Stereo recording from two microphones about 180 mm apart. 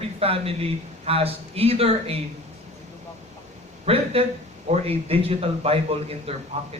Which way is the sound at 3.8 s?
35° right (ahead or behind).